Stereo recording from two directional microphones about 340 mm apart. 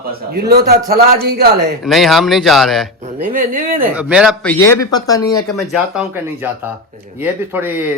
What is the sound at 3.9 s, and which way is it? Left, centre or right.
Speech, centre.